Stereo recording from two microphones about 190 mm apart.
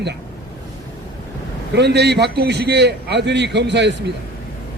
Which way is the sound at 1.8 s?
60° right (ahead or behind).